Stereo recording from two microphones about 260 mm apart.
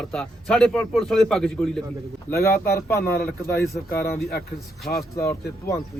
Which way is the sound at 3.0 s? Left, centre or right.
Left.